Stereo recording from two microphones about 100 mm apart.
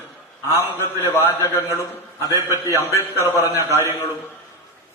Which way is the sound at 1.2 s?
30° left (ahead or behind).